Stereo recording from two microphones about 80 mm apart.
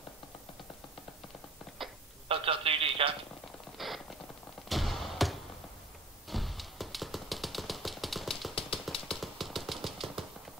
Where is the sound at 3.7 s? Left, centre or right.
Centre.